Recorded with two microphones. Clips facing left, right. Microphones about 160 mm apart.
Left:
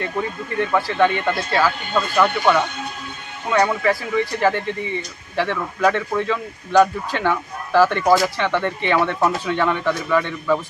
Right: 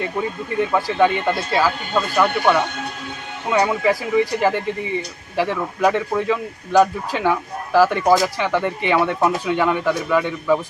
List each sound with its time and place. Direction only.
0.0 s speech: 10° right (ahead or behind)